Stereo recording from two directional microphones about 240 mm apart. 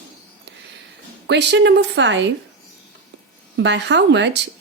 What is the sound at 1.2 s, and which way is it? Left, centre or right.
Speech, right.